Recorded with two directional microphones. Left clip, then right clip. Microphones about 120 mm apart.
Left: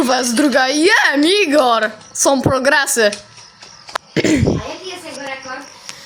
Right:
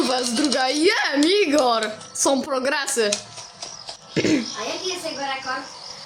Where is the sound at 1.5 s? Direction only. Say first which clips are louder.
Left 6 dB; 25° left (ahead or behind); by 3.1 s 55° left (ahead or behind).